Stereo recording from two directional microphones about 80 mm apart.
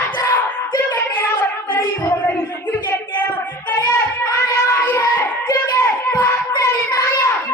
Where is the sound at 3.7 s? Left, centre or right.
Left.